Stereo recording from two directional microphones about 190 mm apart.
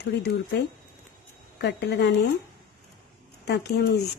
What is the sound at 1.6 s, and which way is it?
Speech, 65° left (ahead or behind).